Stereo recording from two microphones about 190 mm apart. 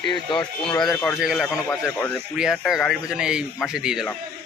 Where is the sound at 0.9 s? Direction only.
10° left (ahead or behind).